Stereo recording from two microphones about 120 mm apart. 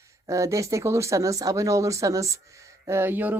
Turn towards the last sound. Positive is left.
turn(degrees=-15)  # may be behind; listen again after turning